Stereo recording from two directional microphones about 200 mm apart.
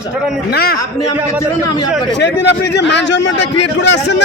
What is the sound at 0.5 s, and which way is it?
Speech, 50° left (ahead or behind).